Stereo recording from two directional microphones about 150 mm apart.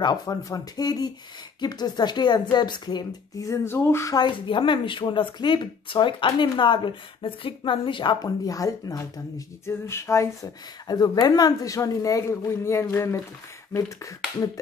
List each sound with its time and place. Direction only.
0.0 s a woman's voice: 25° left (ahead or behind)
9.7 s a sound: 15° left (ahead or behind)
10.9 s speech: 25° left (ahead or behind)